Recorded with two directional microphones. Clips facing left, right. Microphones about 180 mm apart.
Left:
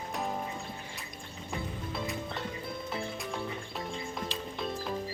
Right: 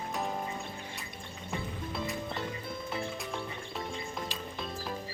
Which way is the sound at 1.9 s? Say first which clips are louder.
Right 1 dB; centre (ahead or behind).